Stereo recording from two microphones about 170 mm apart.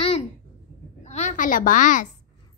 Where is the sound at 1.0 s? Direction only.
45° left (ahead or behind).